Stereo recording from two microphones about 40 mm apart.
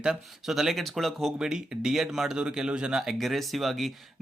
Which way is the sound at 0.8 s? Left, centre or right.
Centre.